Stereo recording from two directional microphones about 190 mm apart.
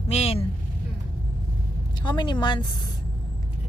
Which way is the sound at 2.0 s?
25° left (ahead or behind).